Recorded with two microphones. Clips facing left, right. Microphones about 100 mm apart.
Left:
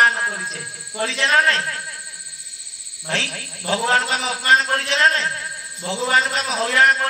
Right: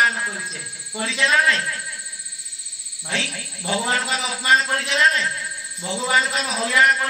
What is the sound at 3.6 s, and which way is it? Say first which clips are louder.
A man's voice: left 3 dB; 65° left (ahead or behind).